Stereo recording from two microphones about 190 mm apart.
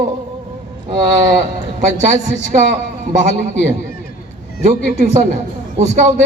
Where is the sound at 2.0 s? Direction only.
40° right (ahead or behind).